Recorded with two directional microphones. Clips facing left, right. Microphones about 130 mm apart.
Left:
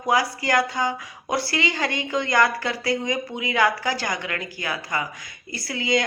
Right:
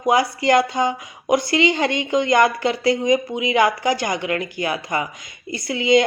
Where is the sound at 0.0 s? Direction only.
20° right (ahead or behind).